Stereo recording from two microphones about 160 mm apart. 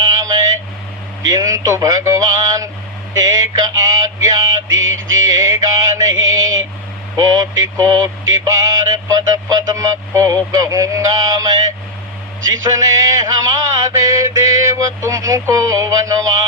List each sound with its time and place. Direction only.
1.3 s music: 20° right (ahead or behind)
3.2 s male singing: 25° right (ahead or behind)
7.2 s music: 20° right (ahead or behind)
12.7 s music: 20° right (ahead or behind)